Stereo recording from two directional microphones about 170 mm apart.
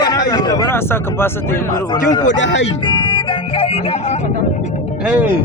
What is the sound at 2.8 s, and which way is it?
Music, 30° left (ahead or behind).